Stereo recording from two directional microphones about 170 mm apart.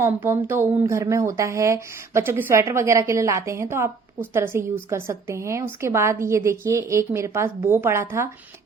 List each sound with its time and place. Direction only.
0.0 s speech: 15° right (ahead or behind)